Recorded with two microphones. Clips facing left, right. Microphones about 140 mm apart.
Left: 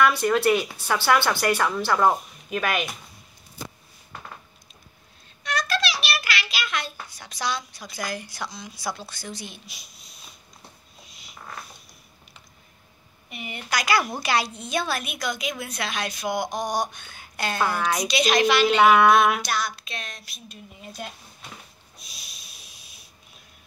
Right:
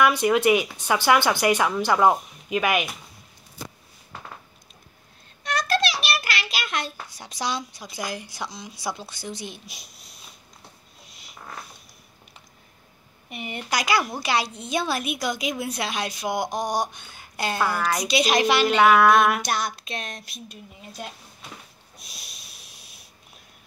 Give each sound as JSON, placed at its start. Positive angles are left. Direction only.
{"t": 0.0, "sound": "speech", "side_deg": -15}
{"t": 5.4, "sound": "a sound", "side_deg": -50}
{"t": 8.8, "sound": "speech", "side_deg": -15}
{"t": 13.7, "sound": "speech", "side_deg": -15}
{"t": 14.2, "sound": "speech", "side_deg": 0}
{"t": 16.3, "sound": "a sound", "side_deg": -5}
{"t": 17.4, "sound": "speech", "side_deg": -5}
{"t": 18.8, "sound": "a sound", "side_deg": 0}
{"t": 19.5, "sound": "speech", "side_deg": -20}